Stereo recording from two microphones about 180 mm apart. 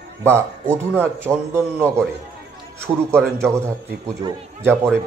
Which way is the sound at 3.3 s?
15° right (ahead or behind).